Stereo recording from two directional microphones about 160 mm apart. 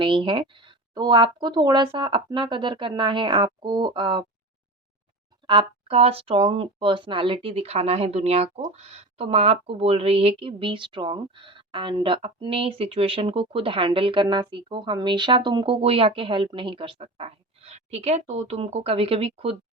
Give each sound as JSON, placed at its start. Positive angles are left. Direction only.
{"t": 0.0, "sound": "speech", "side_deg": -30}
{"t": 5.5, "sound": "speech", "side_deg": -35}